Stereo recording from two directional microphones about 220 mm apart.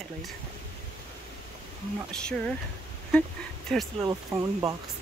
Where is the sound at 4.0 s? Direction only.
15° right (ahead or behind).